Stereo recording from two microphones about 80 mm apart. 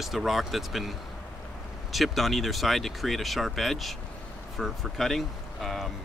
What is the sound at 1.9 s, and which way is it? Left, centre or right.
Speech, centre.